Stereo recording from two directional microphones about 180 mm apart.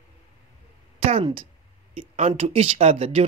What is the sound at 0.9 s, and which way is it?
A man's voice, 35° right (ahead or behind).